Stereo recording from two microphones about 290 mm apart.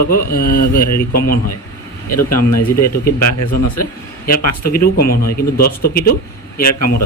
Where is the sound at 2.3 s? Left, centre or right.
Left.